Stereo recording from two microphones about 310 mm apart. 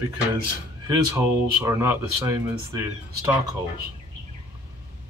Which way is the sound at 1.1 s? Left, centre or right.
Centre.